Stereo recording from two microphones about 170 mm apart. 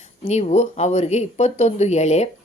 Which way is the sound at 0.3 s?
40° left (ahead or behind).